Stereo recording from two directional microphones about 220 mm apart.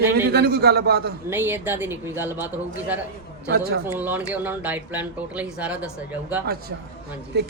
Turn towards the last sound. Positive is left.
turn(degrees=-50)  # may be behind; listen again after turning